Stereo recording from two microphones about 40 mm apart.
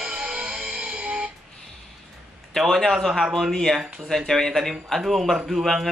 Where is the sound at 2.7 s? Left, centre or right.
Centre.